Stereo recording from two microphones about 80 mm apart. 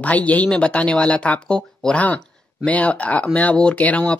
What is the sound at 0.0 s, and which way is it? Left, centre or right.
Speech, centre.